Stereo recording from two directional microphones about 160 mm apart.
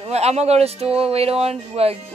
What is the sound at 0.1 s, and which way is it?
Speech, 40° right (ahead or behind).